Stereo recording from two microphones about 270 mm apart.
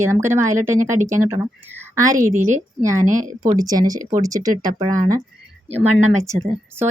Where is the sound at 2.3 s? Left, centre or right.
Right.